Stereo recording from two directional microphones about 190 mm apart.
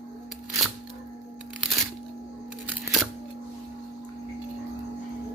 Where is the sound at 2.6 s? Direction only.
5° right (ahead or behind).